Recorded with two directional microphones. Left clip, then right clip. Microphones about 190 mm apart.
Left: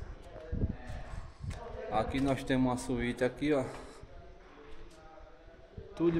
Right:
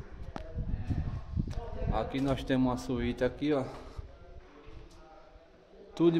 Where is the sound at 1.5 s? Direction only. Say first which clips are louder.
Left 2 dB; centre (ahead or behind).